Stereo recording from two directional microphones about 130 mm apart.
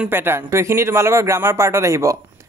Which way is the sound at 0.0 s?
15° right (ahead or behind).